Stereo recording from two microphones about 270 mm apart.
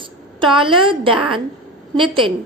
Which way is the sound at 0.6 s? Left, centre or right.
Centre.